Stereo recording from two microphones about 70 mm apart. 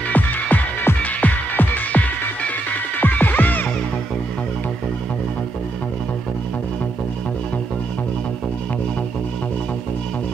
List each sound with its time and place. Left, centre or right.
0.1 s music: left